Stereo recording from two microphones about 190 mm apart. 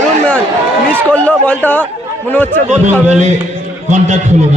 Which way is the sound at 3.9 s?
40° right (ahead or behind).